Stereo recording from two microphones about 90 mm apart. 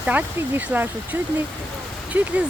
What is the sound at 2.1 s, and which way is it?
Speech, 20° right (ahead or behind).